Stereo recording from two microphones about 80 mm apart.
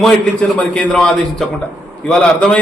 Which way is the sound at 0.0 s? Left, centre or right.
Centre.